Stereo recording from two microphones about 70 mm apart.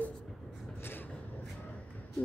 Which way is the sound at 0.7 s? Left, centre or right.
Left.